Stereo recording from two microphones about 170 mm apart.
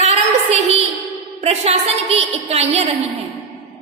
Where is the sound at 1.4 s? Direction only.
40° right (ahead or behind).